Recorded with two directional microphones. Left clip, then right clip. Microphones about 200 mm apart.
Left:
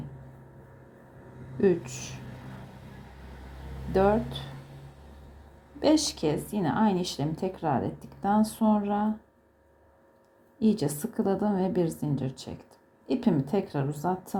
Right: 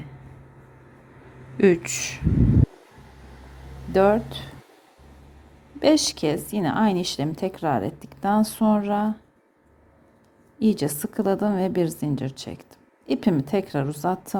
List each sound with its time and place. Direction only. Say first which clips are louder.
1.6 s a woman's voice: right 6 dB; 25° right (ahead or behind)
3.9 s a woman's voice: right 5 dB; 25° right (ahead or behind)
5.8 s a woman's voice: right 5 dB; 25° right (ahead or behind)
10.6 s a woman's voice: right 4 dB; 25° right (ahead or behind)